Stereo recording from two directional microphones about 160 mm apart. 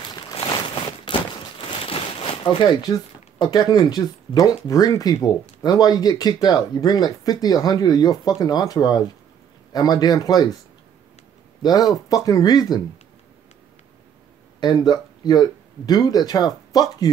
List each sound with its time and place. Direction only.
0.0 s a sound: 30° left (ahead or behind)
2.4 s speech: 30° left (ahead or behind)
11.6 s speech: 25° left (ahead or behind)
14.6 s speech: 25° left (ahead or behind)